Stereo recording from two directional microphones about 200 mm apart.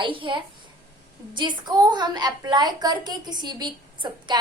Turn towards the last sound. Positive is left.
turn(degrees=-20)  # may be behind; listen again after turning